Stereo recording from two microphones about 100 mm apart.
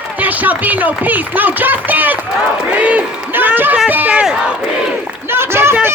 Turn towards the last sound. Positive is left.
turn(degrees=-25)  # may be behind; listen again after turning